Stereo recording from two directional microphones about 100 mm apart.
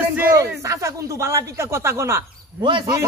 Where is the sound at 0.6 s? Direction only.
30° right (ahead or behind).